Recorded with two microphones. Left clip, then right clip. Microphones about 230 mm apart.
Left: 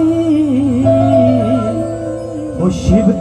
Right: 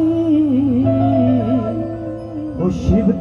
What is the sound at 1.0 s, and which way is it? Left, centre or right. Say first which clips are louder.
Music: left 6 dB; left.